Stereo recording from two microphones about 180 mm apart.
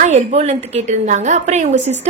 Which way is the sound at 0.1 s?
35° right (ahead or behind).